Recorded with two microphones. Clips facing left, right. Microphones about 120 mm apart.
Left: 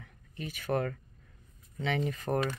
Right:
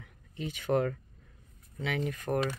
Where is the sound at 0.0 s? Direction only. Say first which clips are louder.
Right 3 dB; 15° right (ahead or behind).